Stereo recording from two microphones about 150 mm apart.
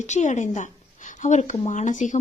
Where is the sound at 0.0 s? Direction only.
50° left (ahead or behind).